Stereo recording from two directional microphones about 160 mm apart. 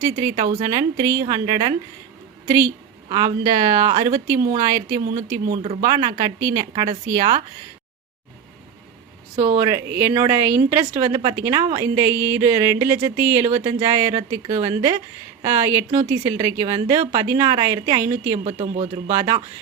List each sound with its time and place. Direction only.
0.0 s a woman's voice: 20° right (ahead or behind)
9.3 s speech: 40° right (ahead or behind)
9.6 s a woman's voice: 20° right (ahead or behind)
18.4 s speech: 40° right (ahead or behind)
19.1 s a woman's voice: 25° right (ahead or behind)